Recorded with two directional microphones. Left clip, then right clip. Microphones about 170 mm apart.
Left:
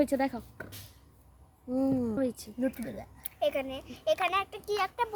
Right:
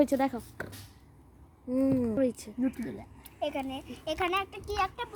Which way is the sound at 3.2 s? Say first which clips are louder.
Left 4 dB; 45° left (ahead or behind).